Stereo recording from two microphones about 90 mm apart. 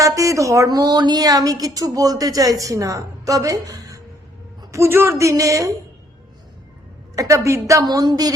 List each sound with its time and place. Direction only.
0.0 s speech: 35° right (ahead or behind)
4.7 s speech: 30° right (ahead or behind)
7.2 s speech: 35° right (ahead or behind)
7.9 s speech: 50° right (ahead or behind)